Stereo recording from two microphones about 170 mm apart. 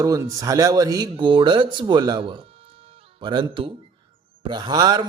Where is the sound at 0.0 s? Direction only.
20° right (ahead or behind).